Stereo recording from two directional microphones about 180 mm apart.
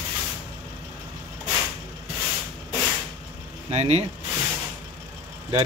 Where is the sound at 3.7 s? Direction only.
35° right (ahead or behind).